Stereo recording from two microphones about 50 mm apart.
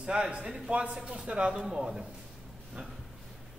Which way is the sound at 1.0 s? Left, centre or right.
Centre.